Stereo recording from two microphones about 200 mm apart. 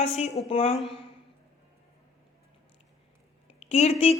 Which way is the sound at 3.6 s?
35° left (ahead or behind).